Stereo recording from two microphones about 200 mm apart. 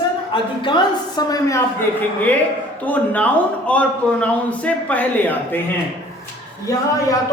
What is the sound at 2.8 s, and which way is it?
A man's voice, 5° left (ahead or behind).